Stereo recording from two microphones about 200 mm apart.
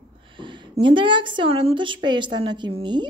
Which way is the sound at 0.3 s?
25° right (ahead or behind).